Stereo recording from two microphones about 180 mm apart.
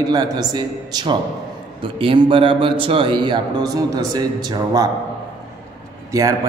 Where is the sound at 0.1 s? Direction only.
20° right (ahead or behind).